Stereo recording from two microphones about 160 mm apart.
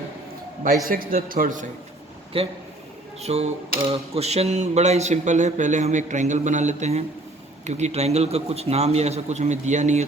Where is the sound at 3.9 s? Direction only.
40° right (ahead or behind).